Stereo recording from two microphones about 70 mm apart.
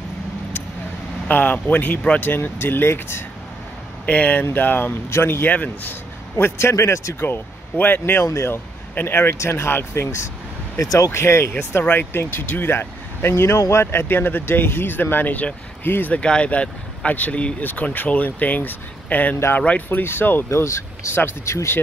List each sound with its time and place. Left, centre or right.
1.2 s speech: left
4.0 s speech: left
6.3 s speech: left
7.2 s speech: left
8.0 s speech: left
10.8 s speech: left
11.8 s speech: left
14.0 s speech: left
20.5 s speech: left